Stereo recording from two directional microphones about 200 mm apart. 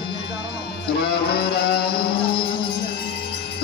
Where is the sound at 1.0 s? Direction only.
50° left (ahead or behind).